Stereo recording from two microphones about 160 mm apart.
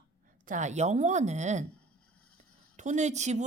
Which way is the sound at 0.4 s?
50° right (ahead or behind).